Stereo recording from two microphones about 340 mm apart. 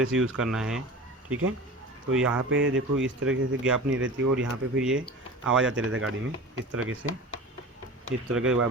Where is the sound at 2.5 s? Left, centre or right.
Right.